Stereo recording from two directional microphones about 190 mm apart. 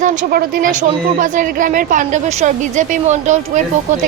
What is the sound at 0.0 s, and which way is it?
A woman's voice, 40° right (ahead or behind).